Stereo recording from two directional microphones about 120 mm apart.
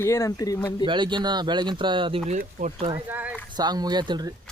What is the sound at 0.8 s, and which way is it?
Speech, 40° right (ahead or behind).